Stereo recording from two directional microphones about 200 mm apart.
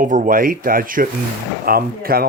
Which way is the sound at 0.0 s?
40° right (ahead or behind).